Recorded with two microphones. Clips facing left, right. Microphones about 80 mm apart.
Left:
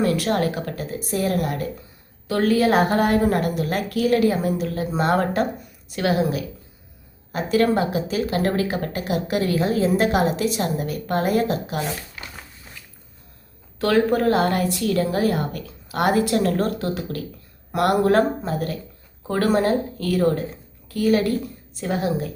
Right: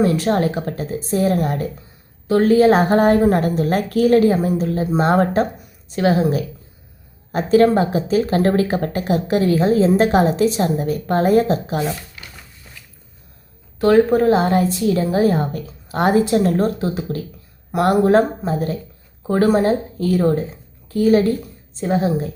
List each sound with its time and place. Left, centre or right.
0.0 s a woman's voice: right
13.7 s a woman's voice: centre